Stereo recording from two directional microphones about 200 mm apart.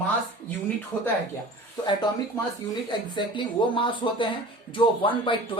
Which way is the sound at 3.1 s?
25° left (ahead or behind).